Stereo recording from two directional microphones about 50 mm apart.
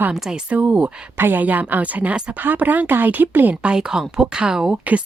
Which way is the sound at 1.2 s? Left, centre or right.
Right.